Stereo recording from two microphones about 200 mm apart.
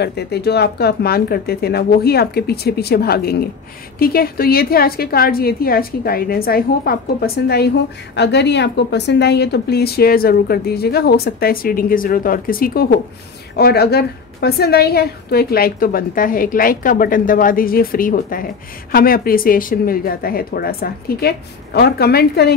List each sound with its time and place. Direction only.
0.0 s a woman's voice: 55° left (ahead or behind)